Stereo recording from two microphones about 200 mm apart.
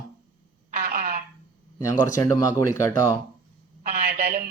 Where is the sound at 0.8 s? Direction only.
45° right (ahead or behind).